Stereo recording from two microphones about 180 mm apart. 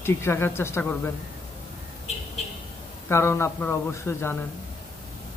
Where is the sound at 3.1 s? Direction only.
15° left (ahead or behind).